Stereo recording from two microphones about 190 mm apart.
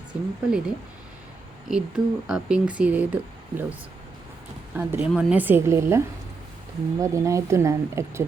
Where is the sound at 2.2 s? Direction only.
5° right (ahead or behind).